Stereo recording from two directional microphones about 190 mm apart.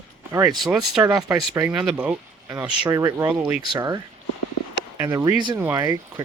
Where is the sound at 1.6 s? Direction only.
5° right (ahead or behind).